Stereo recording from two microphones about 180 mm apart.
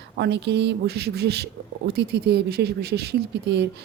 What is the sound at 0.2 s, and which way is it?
Speech, 70° right (ahead or behind).